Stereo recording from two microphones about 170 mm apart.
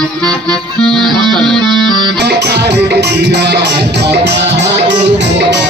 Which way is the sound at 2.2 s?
75° right (ahead or behind).